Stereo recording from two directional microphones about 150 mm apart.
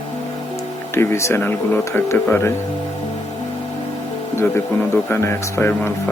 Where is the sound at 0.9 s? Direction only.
15° left (ahead or behind).